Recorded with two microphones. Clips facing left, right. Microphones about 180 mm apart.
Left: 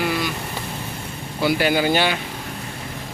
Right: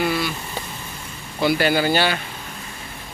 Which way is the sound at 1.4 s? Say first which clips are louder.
Even; 10° left (ahead or behind).